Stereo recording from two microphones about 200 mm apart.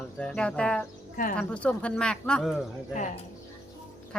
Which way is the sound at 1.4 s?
5° left (ahead or behind).